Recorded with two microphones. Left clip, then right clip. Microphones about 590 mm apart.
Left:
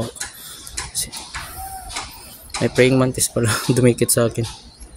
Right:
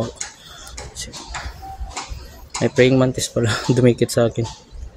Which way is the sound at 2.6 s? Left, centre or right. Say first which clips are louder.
Right 1 dB; left.